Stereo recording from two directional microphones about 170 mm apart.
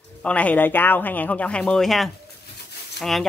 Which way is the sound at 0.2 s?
10° left (ahead or behind).